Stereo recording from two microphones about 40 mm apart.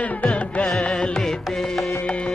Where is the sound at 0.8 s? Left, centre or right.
Left.